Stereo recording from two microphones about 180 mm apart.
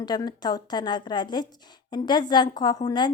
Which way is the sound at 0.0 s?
25° left (ahead or behind).